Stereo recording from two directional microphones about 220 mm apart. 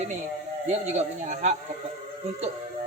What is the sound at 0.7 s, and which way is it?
Speech, 30° right (ahead or behind).